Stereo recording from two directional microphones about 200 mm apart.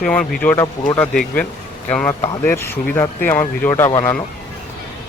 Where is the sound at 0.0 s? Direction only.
5° left (ahead or behind).